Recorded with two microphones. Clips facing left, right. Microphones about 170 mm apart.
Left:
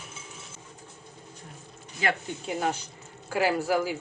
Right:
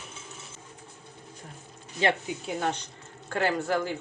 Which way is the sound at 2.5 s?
5° left (ahead or behind).